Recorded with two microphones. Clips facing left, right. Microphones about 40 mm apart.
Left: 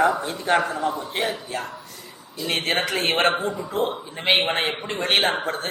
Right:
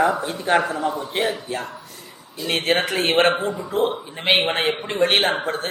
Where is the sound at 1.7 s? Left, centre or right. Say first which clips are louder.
Even; right.